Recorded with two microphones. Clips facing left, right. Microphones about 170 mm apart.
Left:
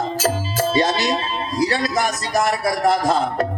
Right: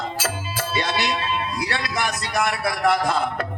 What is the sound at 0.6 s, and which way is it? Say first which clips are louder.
Speech: left 5 dB; 40° left (ahead or behind).